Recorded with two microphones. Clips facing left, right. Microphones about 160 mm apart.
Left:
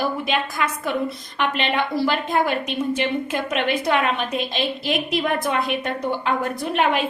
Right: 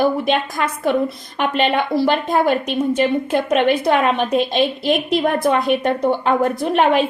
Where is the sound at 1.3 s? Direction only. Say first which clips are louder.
Right 5 dB; 45° right (ahead or behind).